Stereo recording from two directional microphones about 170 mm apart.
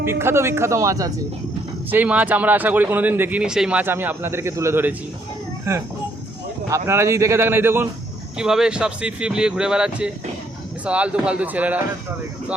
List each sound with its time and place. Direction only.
0.0 s speech: 15° right (ahead or behind)
1.9 s speech: 10° right (ahead or behind)